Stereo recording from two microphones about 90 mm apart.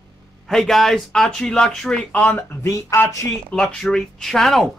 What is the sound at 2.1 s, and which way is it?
Speech, 15° left (ahead or behind).